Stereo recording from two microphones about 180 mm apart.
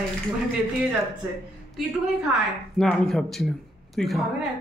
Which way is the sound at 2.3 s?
Centre (ahead or behind).